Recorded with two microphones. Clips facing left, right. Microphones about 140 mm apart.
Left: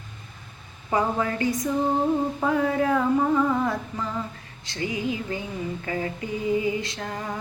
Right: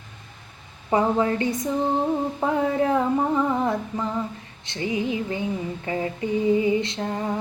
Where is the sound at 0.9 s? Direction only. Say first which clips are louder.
Right 4 dB; 25° right (ahead or behind).